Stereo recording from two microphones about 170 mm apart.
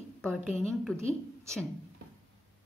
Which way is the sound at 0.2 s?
5° left (ahead or behind).